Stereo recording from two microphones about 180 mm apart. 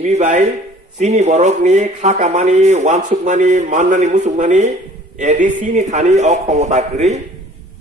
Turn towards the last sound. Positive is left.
turn(degrees=-40)  # may be behind; listen again after turning